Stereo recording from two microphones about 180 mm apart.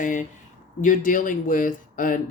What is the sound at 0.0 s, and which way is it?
Speech, 45° left (ahead or behind).